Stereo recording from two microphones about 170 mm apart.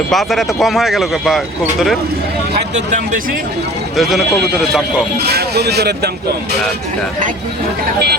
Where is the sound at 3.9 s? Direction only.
Centre (ahead or behind).